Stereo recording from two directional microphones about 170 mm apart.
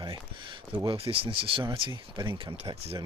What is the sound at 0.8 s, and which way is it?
Speech, 35° right (ahead or behind).